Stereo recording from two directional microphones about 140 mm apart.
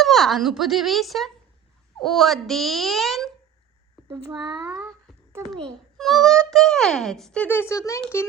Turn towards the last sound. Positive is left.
turn(degrees=20)  # may be behind; listen again after turning